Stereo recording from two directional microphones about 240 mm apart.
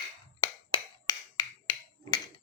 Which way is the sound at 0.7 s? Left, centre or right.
Centre.